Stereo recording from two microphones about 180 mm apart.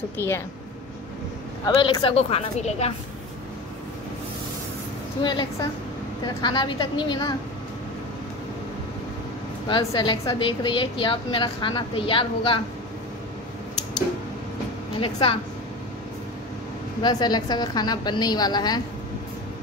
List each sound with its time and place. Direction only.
1.8 s a woman's voice: 30° left (ahead or behind)
5.2 s a woman's voice: 25° left (ahead or behind)
9.7 s a woman's voice: 25° left (ahead or behind)
15.0 s a woman's voice: 30° left (ahead or behind)
17.0 s a woman's voice: 25° left (ahead or behind)